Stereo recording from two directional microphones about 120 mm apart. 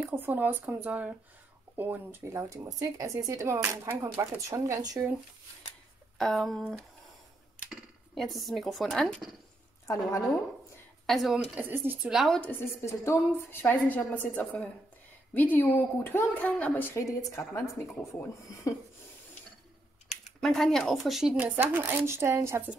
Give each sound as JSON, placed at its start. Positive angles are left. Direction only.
{"t": 0.1, "sound": "speech", "side_deg": -15}
{"t": 6.1, "sound": "speech", "side_deg": 0}
{"t": 9.8, "sound": "a woman's voice", "side_deg": 30}
{"t": 11.1, "sound": "speech", "side_deg": 0}
{"t": 11.5, "sound": "speech", "side_deg": -20}
{"t": 12.1, "sound": "speech", "side_deg": -5}
{"t": 12.4, "sound": "a woman's voice", "side_deg": 20}
{"t": 20.3, "sound": "speech", "side_deg": 5}